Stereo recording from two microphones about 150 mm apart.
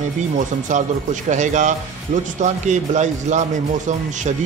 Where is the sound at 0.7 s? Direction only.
55° right (ahead or behind).